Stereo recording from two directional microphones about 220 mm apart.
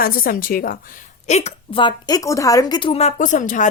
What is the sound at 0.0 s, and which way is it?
A woman's voice, 40° left (ahead or behind).